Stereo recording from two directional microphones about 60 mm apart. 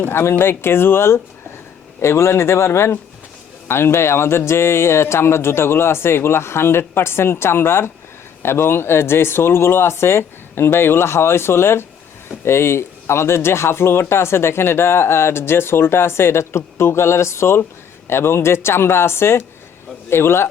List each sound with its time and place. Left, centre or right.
0.1 s speech: left